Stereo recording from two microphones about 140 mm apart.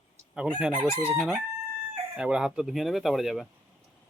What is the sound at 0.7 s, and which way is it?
Chicken, 20° left (ahead or behind).